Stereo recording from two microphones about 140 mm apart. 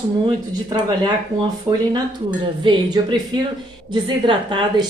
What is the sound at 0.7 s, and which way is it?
A woman's voice, 30° right (ahead or behind).